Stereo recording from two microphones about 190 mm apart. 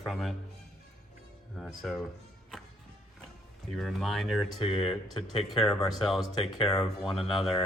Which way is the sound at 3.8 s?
Centre (ahead or behind).